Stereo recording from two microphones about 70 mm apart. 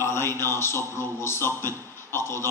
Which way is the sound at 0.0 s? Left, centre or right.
Left.